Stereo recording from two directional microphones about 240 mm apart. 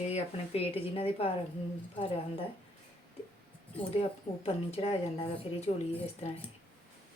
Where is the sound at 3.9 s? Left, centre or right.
Left.